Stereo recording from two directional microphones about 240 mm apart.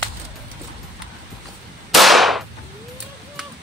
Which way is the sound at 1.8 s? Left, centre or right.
Centre.